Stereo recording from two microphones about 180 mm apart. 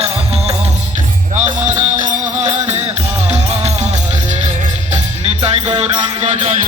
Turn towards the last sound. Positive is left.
turn(degrees=-35)  # may be behind; listen again after turning